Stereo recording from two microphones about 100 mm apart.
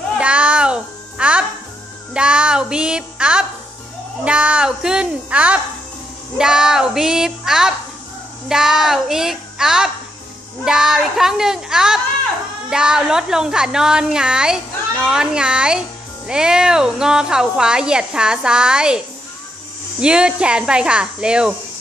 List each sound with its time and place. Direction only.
0.2 s music: 10° right (ahead or behind)
4.2 s a child's voice: 10° right (ahead or behind)
20.0 s a woman's voice: 10° right (ahead or behind)